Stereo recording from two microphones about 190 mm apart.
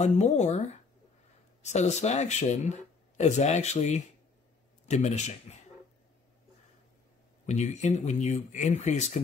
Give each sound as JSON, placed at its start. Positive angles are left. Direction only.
{"t": 0.0, "sound": "speech", "side_deg": 35}
{"t": 7.4, "sound": "speech", "side_deg": 35}